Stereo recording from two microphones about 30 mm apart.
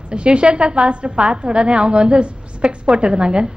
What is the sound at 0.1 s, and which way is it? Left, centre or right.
A woman's voice, right.